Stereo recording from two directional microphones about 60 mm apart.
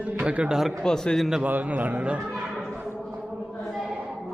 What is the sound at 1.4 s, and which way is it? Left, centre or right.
Speech, right.